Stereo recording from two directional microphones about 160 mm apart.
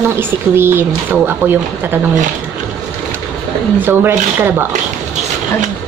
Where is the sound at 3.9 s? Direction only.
15° right (ahead or behind).